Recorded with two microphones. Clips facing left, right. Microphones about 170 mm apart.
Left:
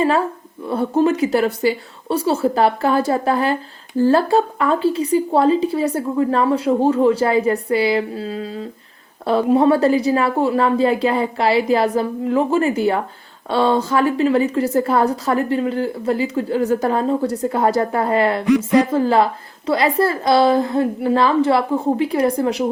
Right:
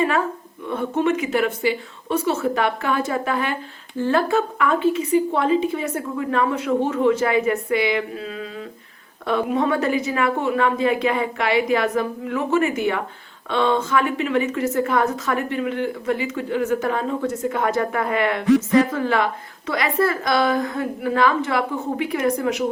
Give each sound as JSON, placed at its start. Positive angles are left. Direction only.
{"t": 0.6, "sound": "speech", "side_deg": 35}